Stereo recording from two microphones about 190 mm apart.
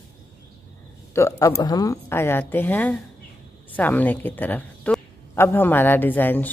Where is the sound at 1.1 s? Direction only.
15° left (ahead or behind).